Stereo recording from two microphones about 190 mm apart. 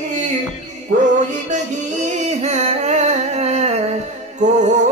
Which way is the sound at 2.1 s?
35° right (ahead or behind).